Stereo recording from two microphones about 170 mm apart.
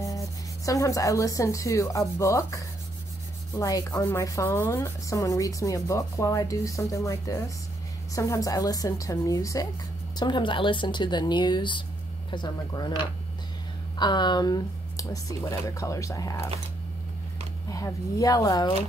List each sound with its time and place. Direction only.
0.7 s rub: 20° left (ahead or behind)
13.9 s rub: 25° left (ahead or behind)
17.6 s rub: 20° left (ahead or behind)